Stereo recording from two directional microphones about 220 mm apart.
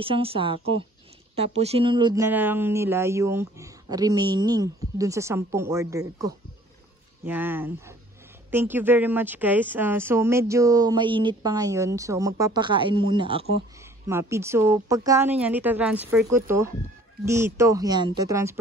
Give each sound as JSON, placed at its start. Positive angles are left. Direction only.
{"t": 0.0, "sound": "a woman's voice", "side_deg": -25}
{"t": 14.0, "sound": "speech", "side_deg": -10}